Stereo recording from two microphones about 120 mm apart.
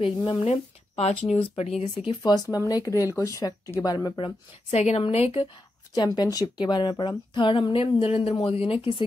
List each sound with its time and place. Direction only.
0.0 s speech: 45° left (ahead or behind)
0.5 s a sound: 65° left (ahead or behind)
1.6 s speech: 60° left (ahead or behind)
2.0 s speech: 35° left (ahead or behind)
4.2 s speech: 55° left (ahead or behind)
5.9 s speech: 35° left (ahead or behind); by 8.8 s 50° left (ahead or behind)